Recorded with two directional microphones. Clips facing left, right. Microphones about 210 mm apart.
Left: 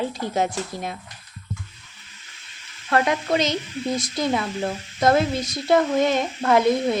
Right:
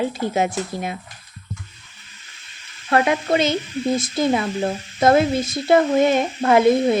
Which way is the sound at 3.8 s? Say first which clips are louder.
Right 5 dB; 25° right (ahead or behind).